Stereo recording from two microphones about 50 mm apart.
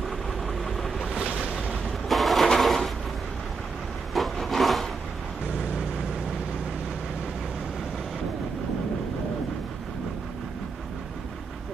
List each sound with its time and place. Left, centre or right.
0.7 s vehicle: centre
1.1 s boat: right
2.0 s a sound: centre
4.1 s wood: centre